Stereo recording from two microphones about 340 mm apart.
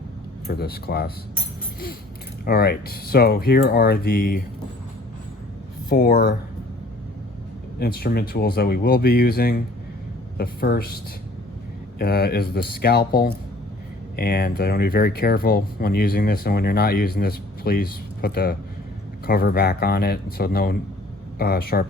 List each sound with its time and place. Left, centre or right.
0.4 s speech: left
2.4 s speech: left
5.9 s speech: left
7.8 s a man's voice: left